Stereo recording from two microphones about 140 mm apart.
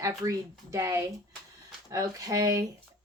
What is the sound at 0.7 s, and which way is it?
A woman's voice, 20° right (ahead or behind).